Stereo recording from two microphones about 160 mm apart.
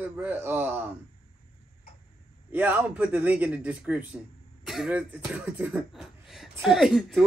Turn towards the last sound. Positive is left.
turn(degrees=0)  # may be behind; listen again after turning